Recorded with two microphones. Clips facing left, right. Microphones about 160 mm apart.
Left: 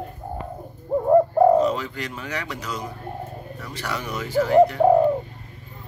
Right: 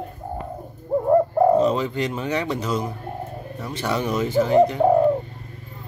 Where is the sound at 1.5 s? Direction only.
25° right (ahead or behind).